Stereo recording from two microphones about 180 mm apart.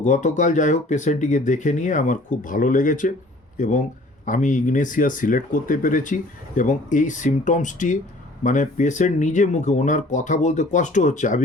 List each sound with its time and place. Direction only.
0.0 s speech: 40° left (ahead or behind)